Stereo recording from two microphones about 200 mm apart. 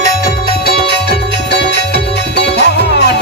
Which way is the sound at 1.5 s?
60° left (ahead or behind).